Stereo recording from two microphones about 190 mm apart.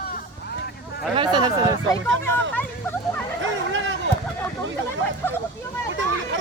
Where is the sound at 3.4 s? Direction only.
75° right (ahead or behind).